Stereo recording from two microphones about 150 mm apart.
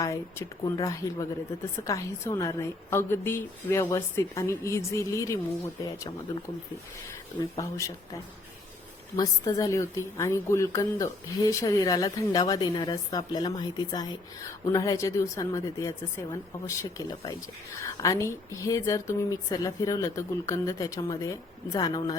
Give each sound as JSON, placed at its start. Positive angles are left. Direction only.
{"t": 0.0, "sound": "a woman's voice", "side_deg": 20}
{"t": 7.6, "sound": "a woman's voice", "side_deg": 20}